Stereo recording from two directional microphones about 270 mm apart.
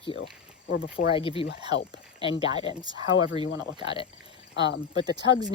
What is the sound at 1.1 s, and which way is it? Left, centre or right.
Speech, centre.